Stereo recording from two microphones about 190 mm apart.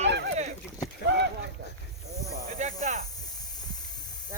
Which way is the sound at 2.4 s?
45° right (ahead or behind).